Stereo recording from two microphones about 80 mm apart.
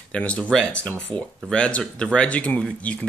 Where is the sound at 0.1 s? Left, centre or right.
Centre.